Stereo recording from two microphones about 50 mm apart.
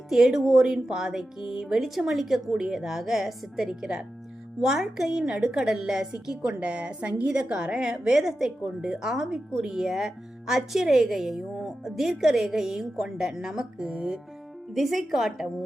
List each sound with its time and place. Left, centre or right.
0.1 s a woman's voice: centre